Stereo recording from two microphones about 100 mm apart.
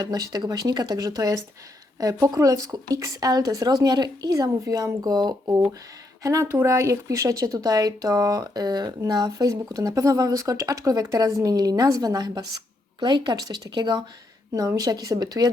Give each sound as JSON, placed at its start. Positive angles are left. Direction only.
{"t": 0.0, "sound": "speech", "side_deg": -40}
{"t": 14.5, "sound": "speech", "side_deg": -35}